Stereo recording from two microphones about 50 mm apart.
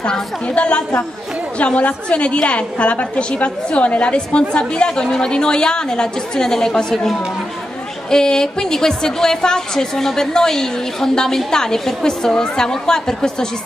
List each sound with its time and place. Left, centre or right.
0.0 s a woman's voice: left